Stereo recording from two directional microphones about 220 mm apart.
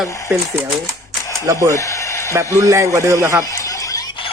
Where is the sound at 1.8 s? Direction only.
15° left (ahead or behind).